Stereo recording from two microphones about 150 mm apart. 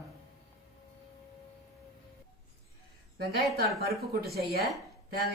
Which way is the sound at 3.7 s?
90° right.